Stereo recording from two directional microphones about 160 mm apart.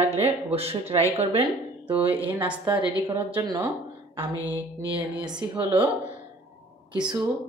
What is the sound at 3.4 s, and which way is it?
Speech, 25° right (ahead or behind).